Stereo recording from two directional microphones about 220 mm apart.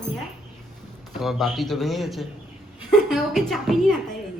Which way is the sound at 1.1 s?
Centre (ahead or behind).